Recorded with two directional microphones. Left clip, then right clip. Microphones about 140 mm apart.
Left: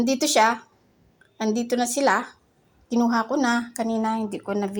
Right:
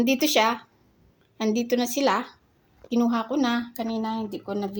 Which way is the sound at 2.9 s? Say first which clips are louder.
Left 3 dB; 5° left (ahead or behind).